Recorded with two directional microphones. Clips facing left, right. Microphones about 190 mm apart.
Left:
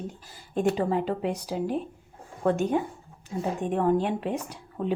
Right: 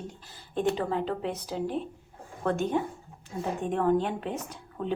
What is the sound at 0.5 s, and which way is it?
A woman's voice, 10° left (ahead or behind).